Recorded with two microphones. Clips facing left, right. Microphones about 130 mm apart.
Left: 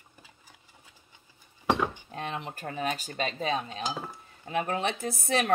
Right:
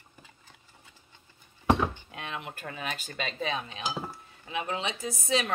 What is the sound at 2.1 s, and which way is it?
Speech, 35° left (ahead or behind).